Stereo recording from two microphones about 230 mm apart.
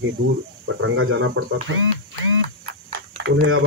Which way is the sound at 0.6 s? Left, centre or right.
Right.